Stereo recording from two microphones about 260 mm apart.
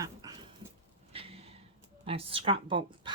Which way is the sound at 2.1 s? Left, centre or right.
Right.